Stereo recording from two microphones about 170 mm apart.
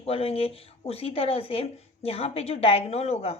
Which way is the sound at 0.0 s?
35° left (ahead or behind).